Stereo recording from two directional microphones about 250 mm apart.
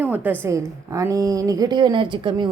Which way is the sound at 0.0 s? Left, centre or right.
Centre.